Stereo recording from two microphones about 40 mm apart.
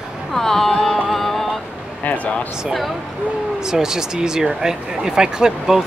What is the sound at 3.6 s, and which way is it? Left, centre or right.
Speech, centre.